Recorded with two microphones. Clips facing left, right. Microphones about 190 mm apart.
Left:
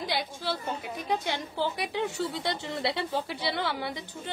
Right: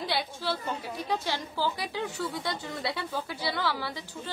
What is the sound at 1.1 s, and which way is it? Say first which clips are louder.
A woman's voice: left 1 dB; 20° left (ahead or behind).